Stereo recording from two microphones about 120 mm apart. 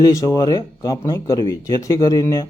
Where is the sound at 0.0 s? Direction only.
25° left (ahead or behind).